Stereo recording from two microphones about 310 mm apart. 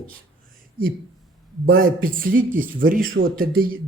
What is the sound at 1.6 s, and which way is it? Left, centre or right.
Speech, right.